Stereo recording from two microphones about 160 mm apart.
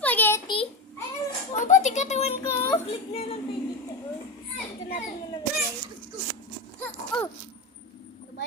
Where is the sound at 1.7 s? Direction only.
50° left (ahead or behind).